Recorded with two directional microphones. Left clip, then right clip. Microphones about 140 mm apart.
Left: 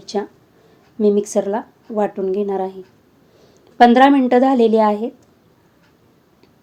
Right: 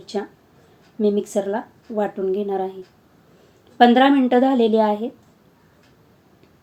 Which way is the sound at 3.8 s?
35° left (ahead or behind).